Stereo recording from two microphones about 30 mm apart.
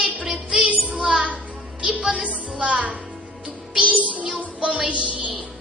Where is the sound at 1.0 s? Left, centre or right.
Right.